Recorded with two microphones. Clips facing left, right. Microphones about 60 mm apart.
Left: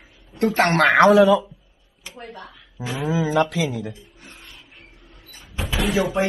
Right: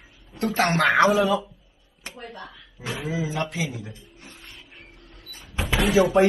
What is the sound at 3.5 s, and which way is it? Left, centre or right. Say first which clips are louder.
Speech: left 6 dB; left.